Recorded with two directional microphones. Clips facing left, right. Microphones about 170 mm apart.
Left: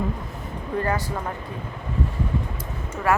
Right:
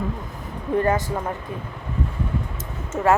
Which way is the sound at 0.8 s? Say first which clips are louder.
Right 4 dB; 20° right (ahead or behind).